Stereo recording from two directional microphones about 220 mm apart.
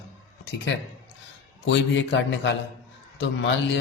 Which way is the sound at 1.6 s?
55° left (ahead or behind).